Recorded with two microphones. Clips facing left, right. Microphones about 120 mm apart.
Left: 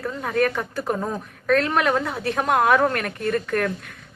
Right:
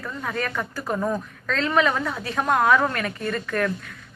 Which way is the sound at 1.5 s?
60° left (ahead or behind).